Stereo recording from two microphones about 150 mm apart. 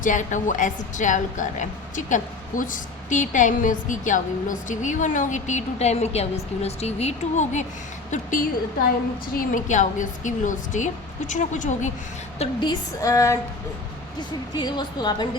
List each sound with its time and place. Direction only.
0.0 s a woman's voice: 55° left (ahead or behind)
8.1 s a woman's voice: 65° left (ahead or behind)
12.5 s a woman's voice: 25° left (ahead or behind)